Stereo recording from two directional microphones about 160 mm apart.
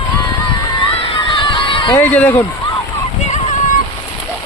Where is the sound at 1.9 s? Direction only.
10° left (ahead or behind).